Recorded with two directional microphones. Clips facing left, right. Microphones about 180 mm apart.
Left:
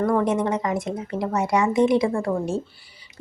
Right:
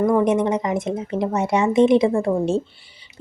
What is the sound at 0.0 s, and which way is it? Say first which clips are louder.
Speech: right 3 dB; 15° right (ahead or behind).